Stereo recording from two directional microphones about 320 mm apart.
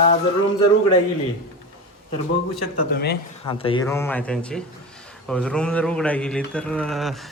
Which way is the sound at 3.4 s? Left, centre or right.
Centre.